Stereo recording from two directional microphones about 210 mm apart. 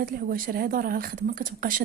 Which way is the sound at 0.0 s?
45° right (ahead or behind).